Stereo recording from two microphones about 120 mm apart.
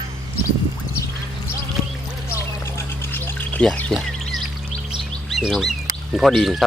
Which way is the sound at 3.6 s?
5° left (ahead or behind).